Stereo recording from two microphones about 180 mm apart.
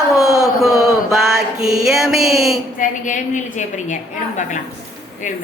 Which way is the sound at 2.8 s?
45° left (ahead or behind).